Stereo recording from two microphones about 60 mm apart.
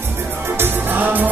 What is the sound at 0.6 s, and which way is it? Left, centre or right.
Music, right.